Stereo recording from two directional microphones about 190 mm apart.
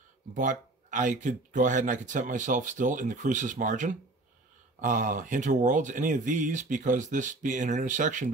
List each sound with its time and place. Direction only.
0.3 s speech: 40° right (ahead or behind)